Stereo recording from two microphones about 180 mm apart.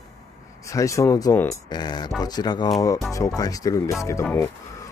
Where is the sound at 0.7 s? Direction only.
15° left (ahead or behind).